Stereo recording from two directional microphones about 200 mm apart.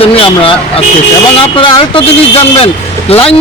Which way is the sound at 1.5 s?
25° left (ahead or behind).